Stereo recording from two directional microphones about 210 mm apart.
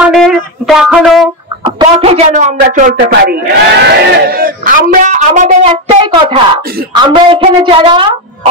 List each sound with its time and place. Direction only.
0.0 s speech: centre (ahead or behind)
1.6 s speech: 25° right (ahead or behind)
3.0 s a man's voice: 45° right (ahead or behind); by 8.2 s 25° right (ahead or behind)